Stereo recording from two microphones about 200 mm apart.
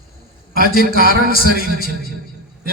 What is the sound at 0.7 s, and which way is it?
A man's voice, 50° left (ahead or behind).